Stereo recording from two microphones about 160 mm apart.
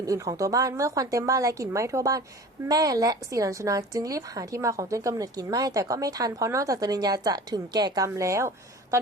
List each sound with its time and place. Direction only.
0.0 s a woman's voice: 20° right (ahead or behind)